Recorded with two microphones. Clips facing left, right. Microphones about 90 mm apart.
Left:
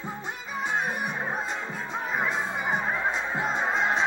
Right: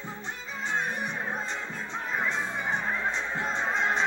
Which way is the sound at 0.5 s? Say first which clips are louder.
Left 2 dB; 10° left (ahead or behind).